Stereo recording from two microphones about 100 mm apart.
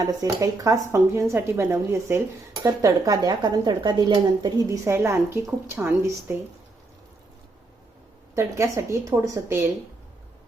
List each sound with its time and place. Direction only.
0.2 s speech: 35° right (ahead or behind)
2.8 s a woman's voice: 40° right (ahead or behind)
4.9 s speech: 30° right (ahead or behind)
8.4 s speech: 30° right (ahead or behind)